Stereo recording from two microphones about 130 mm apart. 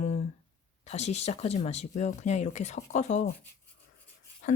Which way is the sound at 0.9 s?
60° left (ahead or behind).